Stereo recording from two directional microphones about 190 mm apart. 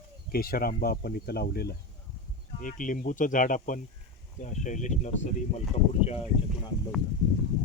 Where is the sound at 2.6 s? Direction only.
45° left (ahead or behind).